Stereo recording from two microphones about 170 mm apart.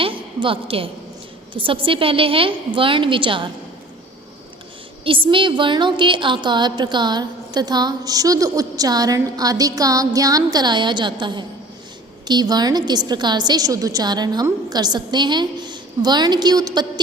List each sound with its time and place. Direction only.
0.0 s a sound: 30° right (ahead or behind)
1.5 s a woman's voice: 30° right (ahead or behind)
5.0 s a woman's voice: 30° right (ahead or behind)